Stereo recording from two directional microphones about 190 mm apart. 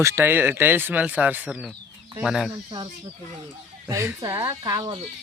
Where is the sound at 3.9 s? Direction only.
15° right (ahead or behind).